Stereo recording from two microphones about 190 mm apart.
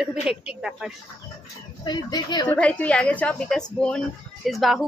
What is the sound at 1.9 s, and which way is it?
Speech, 20° left (ahead or behind).